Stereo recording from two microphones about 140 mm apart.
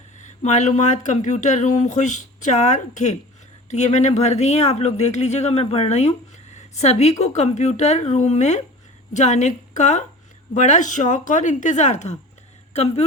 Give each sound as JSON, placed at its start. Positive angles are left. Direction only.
{"t": 0.4, "sound": "speech", "side_deg": 55}